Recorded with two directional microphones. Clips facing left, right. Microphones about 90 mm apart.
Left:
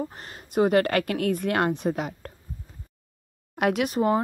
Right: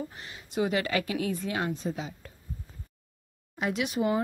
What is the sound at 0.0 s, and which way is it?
A woman's voice, 45° left (ahead or behind).